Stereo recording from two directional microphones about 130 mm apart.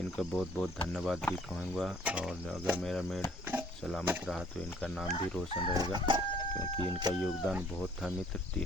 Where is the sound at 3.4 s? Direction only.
15° right (ahead or behind).